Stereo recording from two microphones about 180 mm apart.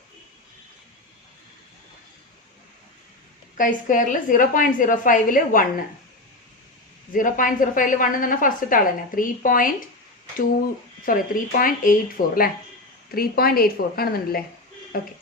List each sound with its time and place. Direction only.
3.6 s a woman's voice: 45° left (ahead or behind)
7.1 s a woman's voice: 50° left (ahead or behind)
11.0 s a woman's voice: 50° left (ahead or behind)